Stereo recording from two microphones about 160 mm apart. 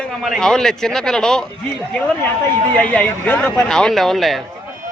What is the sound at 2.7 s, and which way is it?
Speech, 10° left (ahead or behind).